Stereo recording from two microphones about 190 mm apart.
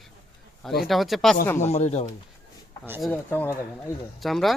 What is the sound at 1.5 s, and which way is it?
Speech, 35° left (ahead or behind).